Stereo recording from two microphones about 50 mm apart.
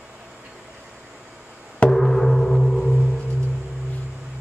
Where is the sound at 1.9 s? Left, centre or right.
Centre.